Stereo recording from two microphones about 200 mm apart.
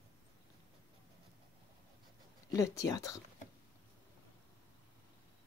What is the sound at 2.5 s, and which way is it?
Speech, 15° left (ahead or behind).